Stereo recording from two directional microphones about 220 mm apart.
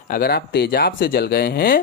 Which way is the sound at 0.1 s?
45° left (ahead or behind).